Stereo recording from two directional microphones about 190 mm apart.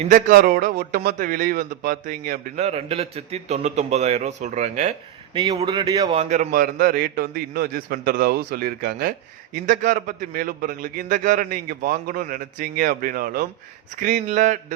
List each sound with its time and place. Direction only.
0.0 s a man's voice: 45° right (ahead or behind)
2.6 s a man's voice: 35° right (ahead or behind)
5.4 s speech: 25° right (ahead or behind)
6.1 s a man's voice: 40° right (ahead or behind)